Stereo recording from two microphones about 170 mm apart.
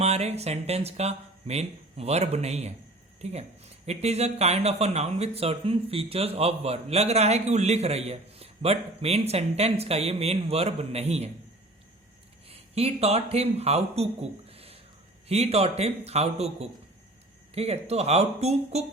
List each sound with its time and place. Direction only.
0.0 s speech: 40° right (ahead or behind)
12.5 s a man's voice: 35° right (ahead or behind)